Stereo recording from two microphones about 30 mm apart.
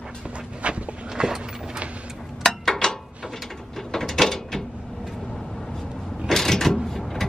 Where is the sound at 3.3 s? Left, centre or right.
Centre.